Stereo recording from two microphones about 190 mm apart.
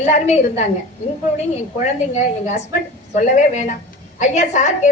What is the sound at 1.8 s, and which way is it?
A woman's voice, 40° left (ahead or behind).